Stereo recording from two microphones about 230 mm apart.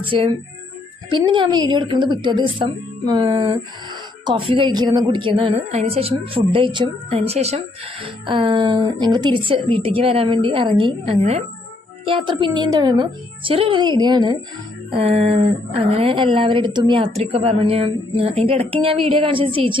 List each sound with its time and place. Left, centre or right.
0.0 s speech: right